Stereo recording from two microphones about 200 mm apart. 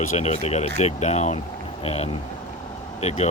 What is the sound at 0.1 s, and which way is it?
Speech, 35° left (ahead or behind).